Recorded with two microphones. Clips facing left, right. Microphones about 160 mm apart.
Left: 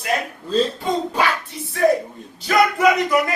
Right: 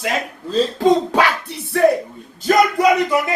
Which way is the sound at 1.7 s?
65° right (ahead or behind).